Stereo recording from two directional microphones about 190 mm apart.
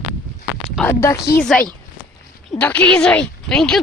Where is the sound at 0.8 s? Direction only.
15° left (ahead or behind).